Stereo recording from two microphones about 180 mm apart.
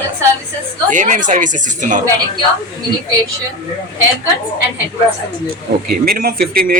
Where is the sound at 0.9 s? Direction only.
45° right (ahead or behind).